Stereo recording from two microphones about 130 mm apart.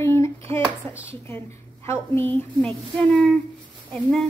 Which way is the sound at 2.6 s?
10° left (ahead or behind).